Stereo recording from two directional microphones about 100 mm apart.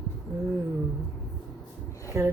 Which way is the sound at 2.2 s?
30° right (ahead or behind).